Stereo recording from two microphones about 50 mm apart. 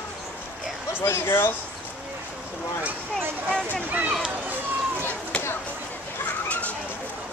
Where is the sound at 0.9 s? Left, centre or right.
Left.